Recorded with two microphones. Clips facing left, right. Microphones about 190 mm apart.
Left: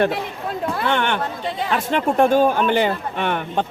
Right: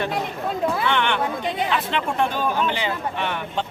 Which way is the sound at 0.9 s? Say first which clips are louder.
Left 2 dB; 45° left (ahead or behind).